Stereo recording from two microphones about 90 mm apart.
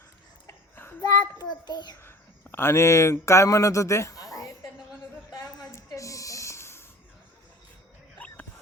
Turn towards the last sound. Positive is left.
turn(degrees=30)  # may be behind; listen again after turning